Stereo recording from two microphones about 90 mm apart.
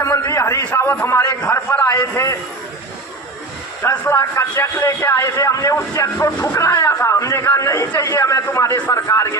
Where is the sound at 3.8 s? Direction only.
35° left (ahead or behind).